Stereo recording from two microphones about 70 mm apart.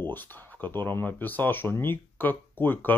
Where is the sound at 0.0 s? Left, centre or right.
Left.